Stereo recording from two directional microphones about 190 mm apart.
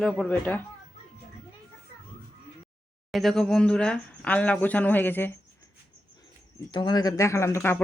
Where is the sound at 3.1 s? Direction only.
Centre (ahead or behind).